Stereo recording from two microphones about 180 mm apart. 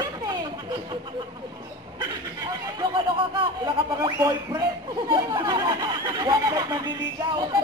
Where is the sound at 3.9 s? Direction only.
20° right (ahead or behind).